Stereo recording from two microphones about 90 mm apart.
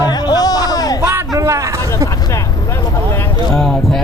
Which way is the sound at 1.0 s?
35° right (ahead or behind).